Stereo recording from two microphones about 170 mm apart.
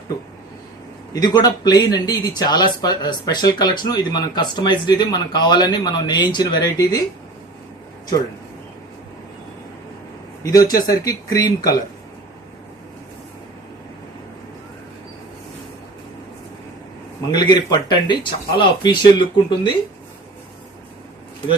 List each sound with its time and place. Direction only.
1.1 s speech: 25° left (ahead or behind)
10.4 s speech: 20° left (ahead or behind)
17.3 s speech: 25° left (ahead or behind)